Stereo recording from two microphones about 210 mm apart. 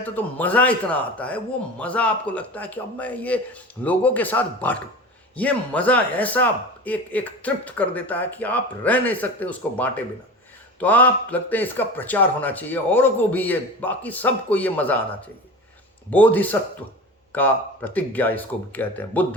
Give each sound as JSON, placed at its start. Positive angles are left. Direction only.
{"t": 0.0, "sound": "speech", "side_deg": 10}
{"t": 16.0, "sound": "speech", "side_deg": 10}